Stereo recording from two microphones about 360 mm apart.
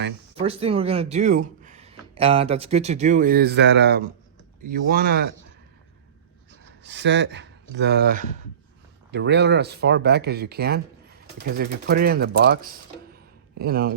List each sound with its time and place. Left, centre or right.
0.3 s speech: centre
6.8 s speech: right